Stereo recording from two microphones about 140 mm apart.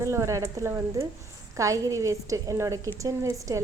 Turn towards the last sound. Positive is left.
turn(degrees=-25)  # may be behind; listen again after turning